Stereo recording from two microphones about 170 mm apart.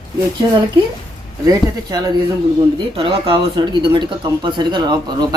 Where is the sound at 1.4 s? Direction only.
20° right (ahead or behind).